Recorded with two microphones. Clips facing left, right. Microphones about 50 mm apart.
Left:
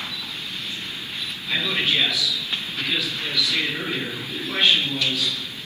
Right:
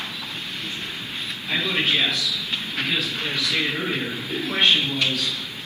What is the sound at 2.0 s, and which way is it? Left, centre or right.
A man's voice, right.